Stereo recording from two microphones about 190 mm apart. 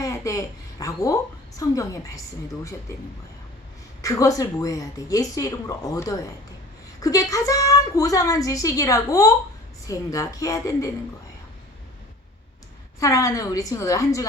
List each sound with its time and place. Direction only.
0.0 s a woman's voice: 15° left (ahead or behind)
4.0 s a woman's voice: 15° left (ahead or behind)
13.0 s a woman's voice: 15° left (ahead or behind)